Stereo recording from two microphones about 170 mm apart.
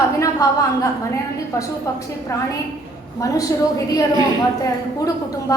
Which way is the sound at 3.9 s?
20° left (ahead or behind).